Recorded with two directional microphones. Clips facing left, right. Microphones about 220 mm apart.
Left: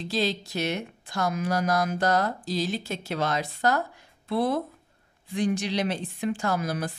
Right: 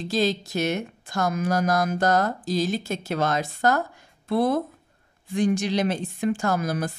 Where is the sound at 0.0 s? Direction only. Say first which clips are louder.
Right 4 dB; 45° right (ahead or behind).